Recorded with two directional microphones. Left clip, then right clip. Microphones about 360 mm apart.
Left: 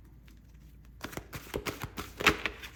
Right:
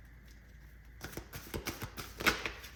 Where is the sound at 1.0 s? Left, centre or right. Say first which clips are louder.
Left 5 dB; centre.